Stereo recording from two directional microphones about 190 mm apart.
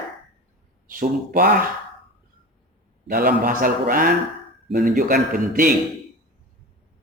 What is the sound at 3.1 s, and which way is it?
A man's voice, 50° right (ahead or behind).